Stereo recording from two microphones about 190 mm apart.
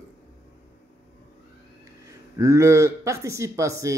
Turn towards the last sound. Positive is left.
turn(degrees=-15)  # may be behind; listen again after turning